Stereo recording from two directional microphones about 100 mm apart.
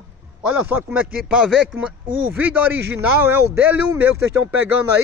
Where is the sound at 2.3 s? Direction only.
15° right (ahead or behind).